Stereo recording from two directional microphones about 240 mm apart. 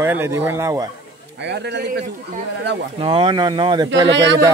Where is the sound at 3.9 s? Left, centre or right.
Right.